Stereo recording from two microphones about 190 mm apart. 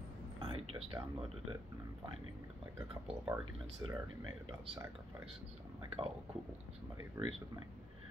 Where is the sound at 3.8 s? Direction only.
20° right (ahead or behind).